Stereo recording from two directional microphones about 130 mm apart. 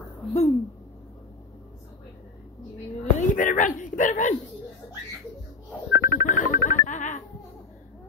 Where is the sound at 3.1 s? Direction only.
80° left.